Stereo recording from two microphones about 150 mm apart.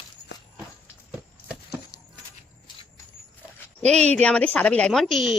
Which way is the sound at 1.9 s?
25° left (ahead or behind).